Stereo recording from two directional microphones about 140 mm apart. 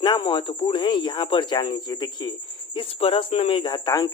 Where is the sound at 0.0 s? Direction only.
35° left (ahead or behind).